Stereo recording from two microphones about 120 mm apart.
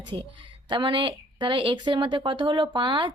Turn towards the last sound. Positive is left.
turn(degrees=-45)  # may be behind; listen again after turning